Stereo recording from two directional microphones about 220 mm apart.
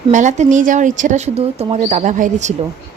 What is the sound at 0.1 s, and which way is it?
Speech, 35° right (ahead or behind).